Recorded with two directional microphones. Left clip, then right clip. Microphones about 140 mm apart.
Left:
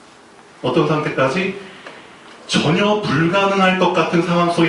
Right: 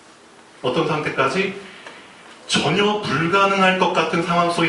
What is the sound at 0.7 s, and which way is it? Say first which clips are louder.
Speech: left 4 dB; 20° right (ahead or behind).